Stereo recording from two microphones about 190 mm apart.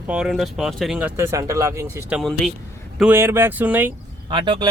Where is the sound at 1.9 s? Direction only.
5° right (ahead or behind).